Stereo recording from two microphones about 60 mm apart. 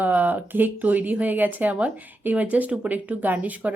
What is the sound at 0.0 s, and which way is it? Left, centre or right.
A woman's voice, right.